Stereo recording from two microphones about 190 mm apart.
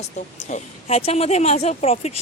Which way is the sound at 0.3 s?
40° left (ahead or behind).